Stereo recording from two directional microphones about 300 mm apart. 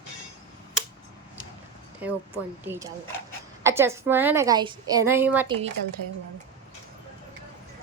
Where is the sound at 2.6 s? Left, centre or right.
Centre.